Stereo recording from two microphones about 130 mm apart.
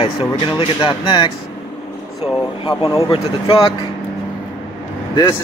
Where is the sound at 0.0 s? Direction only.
45° left (ahead or behind).